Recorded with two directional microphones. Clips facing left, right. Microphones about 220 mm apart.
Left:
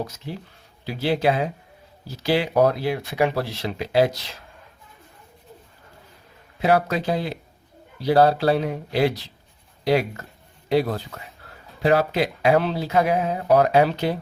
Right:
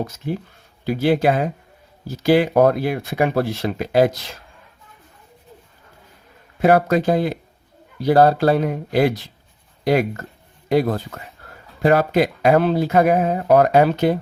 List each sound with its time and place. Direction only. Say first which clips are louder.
0.9 s speech: right 4 dB; 50° right (ahead or behind)
6.6 s speech: right 5 dB; 50° right (ahead or behind)